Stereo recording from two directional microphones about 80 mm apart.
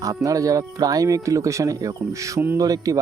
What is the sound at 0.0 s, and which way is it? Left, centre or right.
Speech, right.